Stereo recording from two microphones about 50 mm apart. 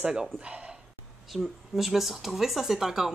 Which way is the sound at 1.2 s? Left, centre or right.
Centre.